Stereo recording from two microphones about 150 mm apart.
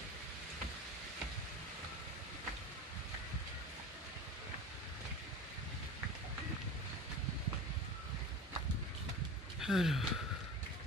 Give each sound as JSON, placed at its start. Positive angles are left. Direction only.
{"t": 9.6, "sound": "speech", "side_deg": 0}